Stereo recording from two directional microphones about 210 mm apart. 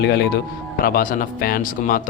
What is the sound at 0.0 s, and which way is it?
Speech, 55° left (ahead or behind).